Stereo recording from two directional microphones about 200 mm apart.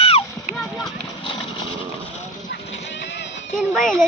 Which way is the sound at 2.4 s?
65° left (ahead or behind).